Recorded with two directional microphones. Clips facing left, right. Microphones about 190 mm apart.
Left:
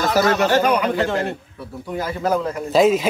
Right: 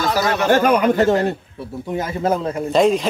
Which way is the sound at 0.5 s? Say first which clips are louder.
Right 3 dB; 50° right (ahead or behind).